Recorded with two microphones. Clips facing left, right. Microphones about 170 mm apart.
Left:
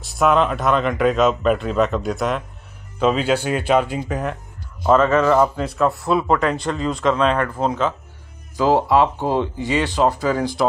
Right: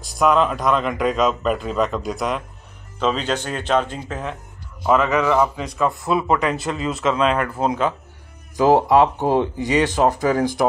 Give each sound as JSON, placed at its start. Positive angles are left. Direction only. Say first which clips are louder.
{"t": 0.0, "sound": "speech", "louder": "even", "side_deg": 0}
{"t": 4.8, "sound": "speech", "louder": "left 3 dB", "side_deg": -15}
{"t": 5.4, "sound": "speech", "louder": "left 2 dB", "side_deg": 0}
{"t": 10.3, "sound": "speech", "louder": "right 2 dB", "side_deg": -45}